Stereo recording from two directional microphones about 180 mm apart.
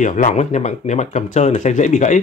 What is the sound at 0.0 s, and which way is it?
Speech, 45° left (ahead or behind).